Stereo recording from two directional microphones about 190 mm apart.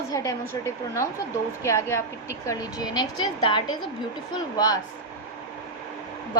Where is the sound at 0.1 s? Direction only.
20° left (ahead or behind).